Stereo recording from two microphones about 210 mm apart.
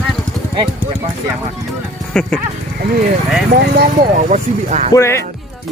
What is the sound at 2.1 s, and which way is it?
Speech, 5° left (ahead or behind).